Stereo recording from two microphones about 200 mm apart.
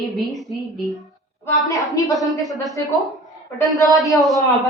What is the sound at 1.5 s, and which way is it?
Speech, 15° left (ahead or behind).